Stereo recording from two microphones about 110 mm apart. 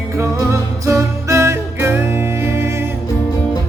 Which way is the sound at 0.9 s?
25° right (ahead or behind).